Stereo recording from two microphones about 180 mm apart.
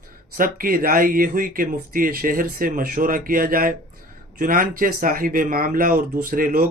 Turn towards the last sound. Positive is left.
turn(degrees=-55)  # may be behind; listen again after turning